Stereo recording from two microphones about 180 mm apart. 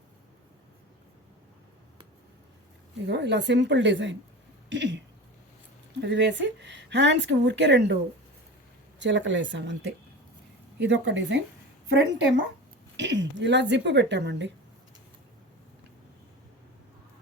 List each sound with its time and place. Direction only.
3.1 s a woman's voice: 70° right (ahead or behind); by 4.9 s 90° right
6.0 s speech: 80° right
9.0 s speech: 85° right
10.8 s a woman's voice: 90° right